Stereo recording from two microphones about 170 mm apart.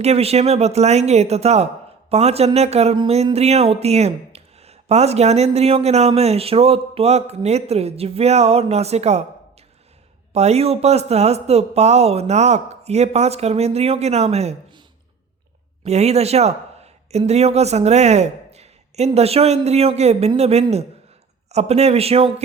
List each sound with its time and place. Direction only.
0.0 s speech: 35° right (ahead or behind)
10.3 s speech: 40° right (ahead or behind)
15.8 s speech: 40° right (ahead or behind)